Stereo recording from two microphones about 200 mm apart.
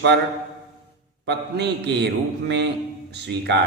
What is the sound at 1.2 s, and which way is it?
Speech, 55° right (ahead or behind).